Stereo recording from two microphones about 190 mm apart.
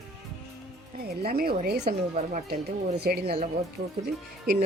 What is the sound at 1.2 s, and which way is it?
Speech, 50° right (ahead or behind).